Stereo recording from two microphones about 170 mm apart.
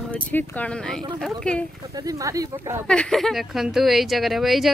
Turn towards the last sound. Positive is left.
turn(degrees=0)  # may be behind; listen again after turning